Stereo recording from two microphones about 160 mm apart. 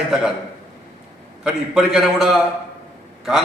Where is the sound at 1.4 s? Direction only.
5° right (ahead or behind).